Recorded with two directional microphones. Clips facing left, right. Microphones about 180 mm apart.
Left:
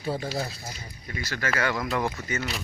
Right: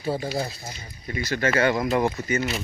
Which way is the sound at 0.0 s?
5° right (ahead or behind).